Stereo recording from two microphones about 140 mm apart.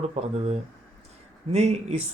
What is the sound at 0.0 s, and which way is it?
Speech, 50° right (ahead or behind).